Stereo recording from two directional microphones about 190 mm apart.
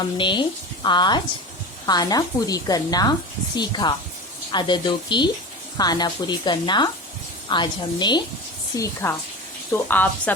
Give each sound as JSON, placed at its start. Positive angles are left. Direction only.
{"t": 0.0, "sound": "a woman's voice", "side_deg": 25}